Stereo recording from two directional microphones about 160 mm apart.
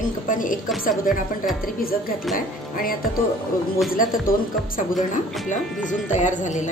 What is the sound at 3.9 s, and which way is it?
Speech, 60° left (ahead or behind).